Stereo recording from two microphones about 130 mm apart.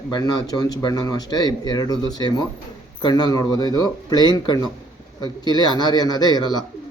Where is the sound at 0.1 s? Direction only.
30° left (ahead or behind).